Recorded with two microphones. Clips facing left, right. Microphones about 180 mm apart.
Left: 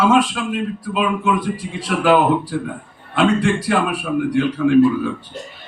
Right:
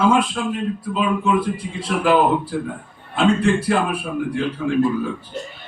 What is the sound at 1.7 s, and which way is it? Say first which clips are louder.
Speech: left 2 dB; 80° left.